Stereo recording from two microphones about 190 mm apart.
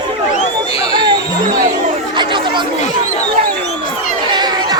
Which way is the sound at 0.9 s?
25° right (ahead or behind).